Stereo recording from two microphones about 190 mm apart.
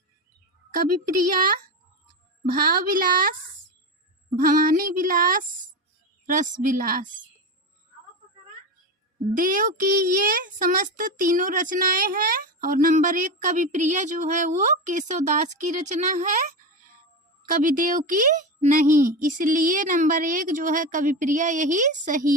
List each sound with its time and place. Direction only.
2.5 s a child's voice: 55° right (ahead or behind)
4.4 s a child's voice: 45° right (ahead or behind)
9.3 s a child's voice: 45° right (ahead or behind)
17.4 s a child's voice: 45° right (ahead or behind)